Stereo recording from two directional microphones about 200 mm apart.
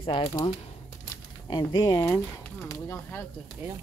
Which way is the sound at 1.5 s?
20° left (ahead or behind).